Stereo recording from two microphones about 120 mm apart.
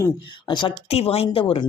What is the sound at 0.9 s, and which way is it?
Speech, 55° left (ahead or behind).